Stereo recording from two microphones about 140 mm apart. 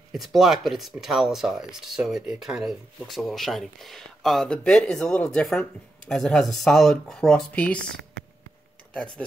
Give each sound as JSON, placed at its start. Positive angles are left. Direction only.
{"t": 0.1, "sound": "speech", "side_deg": 0}